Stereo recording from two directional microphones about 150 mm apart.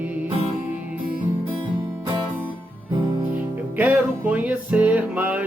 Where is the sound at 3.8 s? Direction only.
10° right (ahead or behind).